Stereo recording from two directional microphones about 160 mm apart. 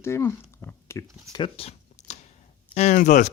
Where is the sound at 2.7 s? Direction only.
45° left (ahead or behind).